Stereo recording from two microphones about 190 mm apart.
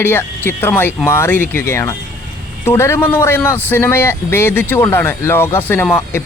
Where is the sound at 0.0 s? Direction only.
10° left (ahead or behind).